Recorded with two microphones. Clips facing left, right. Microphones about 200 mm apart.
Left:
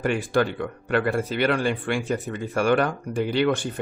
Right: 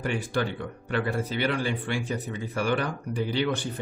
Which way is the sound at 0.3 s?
60° left (ahead or behind).